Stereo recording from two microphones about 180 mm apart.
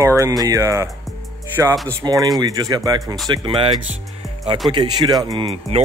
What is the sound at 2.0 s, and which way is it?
Speech, 20° right (ahead or behind).